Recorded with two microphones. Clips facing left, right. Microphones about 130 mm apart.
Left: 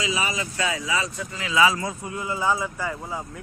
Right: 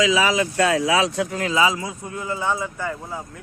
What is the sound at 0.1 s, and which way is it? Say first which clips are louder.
Speech: right 8 dB; 90° right.